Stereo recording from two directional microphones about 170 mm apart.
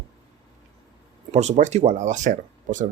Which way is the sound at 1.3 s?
40° right (ahead or behind).